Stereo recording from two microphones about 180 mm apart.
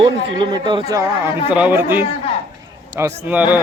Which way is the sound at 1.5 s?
5° right (ahead or behind).